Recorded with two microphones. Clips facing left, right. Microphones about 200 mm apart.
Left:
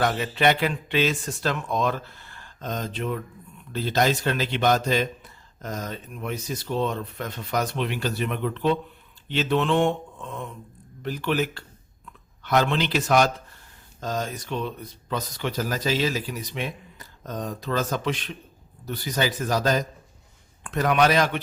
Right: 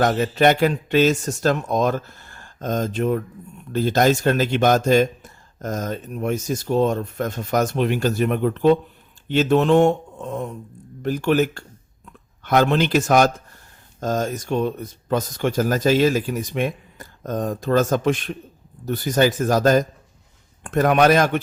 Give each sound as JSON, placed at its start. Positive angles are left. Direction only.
{"t": 0.0, "sound": "speech", "side_deg": -45}